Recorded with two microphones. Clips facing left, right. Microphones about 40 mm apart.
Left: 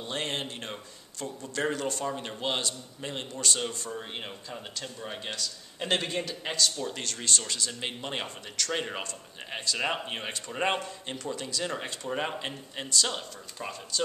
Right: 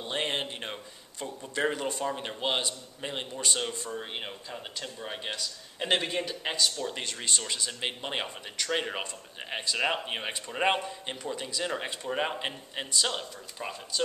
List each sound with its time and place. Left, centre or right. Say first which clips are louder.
0.0 s a man's voice: right 2 dB; centre